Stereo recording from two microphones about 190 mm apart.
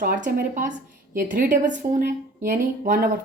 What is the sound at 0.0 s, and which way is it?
Speech, 50° right (ahead or behind).